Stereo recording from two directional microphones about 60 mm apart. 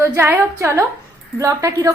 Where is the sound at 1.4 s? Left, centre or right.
Right.